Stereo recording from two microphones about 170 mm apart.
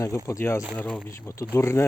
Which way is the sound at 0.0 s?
20° left (ahead or behind).